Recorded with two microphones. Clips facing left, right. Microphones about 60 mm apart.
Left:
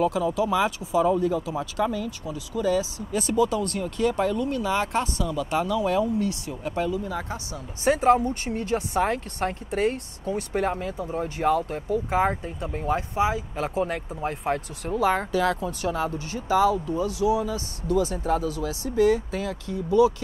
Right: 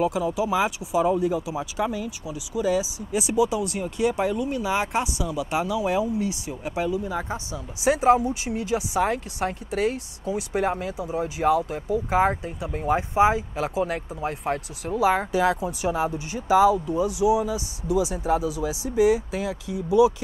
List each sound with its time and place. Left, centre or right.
0.0 s speech: centre
12.9 s speech: right
13.6 s speech: centre
15.0 s speech: centre